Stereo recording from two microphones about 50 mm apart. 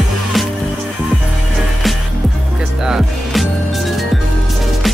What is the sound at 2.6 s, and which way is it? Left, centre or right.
Music, centre.